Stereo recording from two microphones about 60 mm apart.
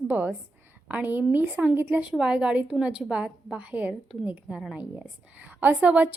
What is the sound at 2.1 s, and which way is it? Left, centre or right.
A woman's voice, centre.